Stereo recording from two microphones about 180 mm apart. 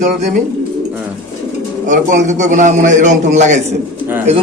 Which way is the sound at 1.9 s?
45° right (ahead or behind).